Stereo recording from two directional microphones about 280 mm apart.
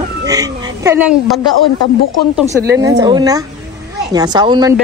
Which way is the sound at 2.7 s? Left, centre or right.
Centre.